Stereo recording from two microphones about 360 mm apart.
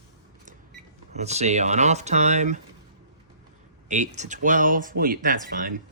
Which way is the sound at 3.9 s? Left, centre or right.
Centre.